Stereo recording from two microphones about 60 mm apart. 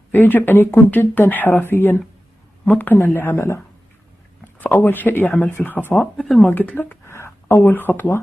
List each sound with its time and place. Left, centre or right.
0.1 s speech: left
3.2 s speech: left
4.6 s speech: left
6.1 s speech: centre
6.4 s speech: left
7.1 s a sound: left
7.6 s speech: left